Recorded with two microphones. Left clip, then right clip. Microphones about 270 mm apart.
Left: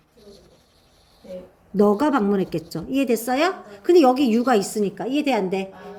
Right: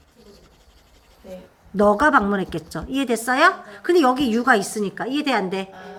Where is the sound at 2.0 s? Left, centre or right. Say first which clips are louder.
Right 4 dB; centre.